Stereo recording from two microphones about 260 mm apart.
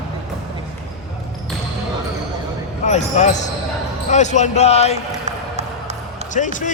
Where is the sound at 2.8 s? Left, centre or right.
Left.